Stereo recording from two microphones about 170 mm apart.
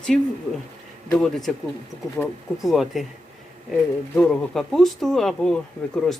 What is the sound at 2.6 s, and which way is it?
Speech, centre (ahead or behind).